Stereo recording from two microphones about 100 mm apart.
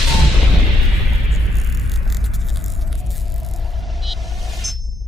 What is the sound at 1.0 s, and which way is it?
Vehicle, centre (ahead or behind).